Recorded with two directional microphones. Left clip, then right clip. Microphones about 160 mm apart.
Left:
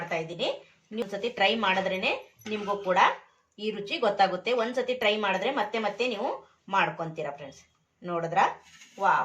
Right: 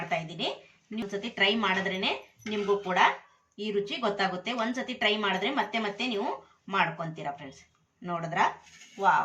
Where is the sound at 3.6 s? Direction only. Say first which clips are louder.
Left 1 dB; 25° left (ahead or behind).